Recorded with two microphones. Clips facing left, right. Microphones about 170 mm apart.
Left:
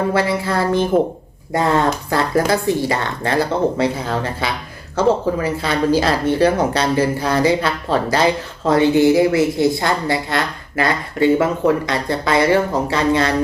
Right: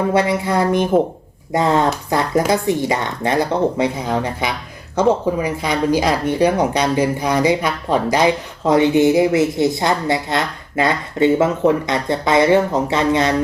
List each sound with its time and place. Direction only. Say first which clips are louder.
0.1 s speech: right 2 dB; 20° right (ahead or behind)